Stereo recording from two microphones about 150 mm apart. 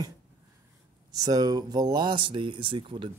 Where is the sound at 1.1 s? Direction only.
25° right (ahead or behind).